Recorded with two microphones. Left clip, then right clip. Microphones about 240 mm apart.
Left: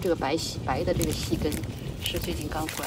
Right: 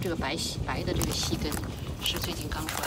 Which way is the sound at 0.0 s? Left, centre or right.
Centre.